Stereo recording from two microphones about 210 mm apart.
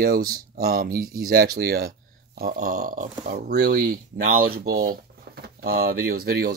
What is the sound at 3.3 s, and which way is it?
Speech, 50° right (ahead or behind).